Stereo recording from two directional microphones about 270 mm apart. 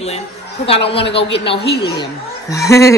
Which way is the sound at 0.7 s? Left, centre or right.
Left.